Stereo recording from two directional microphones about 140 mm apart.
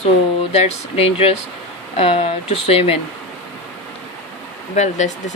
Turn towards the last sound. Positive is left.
turn(degrees=60)  # may be behind; listen again after turning